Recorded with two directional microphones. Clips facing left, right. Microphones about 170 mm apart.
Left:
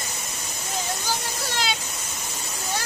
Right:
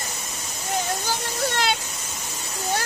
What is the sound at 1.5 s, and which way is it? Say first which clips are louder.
Waterfall: right 1 dB; 55° right (ahead or behind).